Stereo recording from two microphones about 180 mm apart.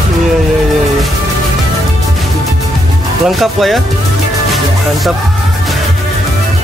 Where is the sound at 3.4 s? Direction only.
Centre (ahead or behind).